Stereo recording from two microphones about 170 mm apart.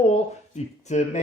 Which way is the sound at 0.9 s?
45° left (ahead or behind).